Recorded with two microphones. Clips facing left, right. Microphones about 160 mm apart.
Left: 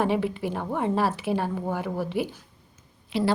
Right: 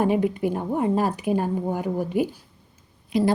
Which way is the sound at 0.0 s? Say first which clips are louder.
Right 4 dB; 45° right (ahead or behind).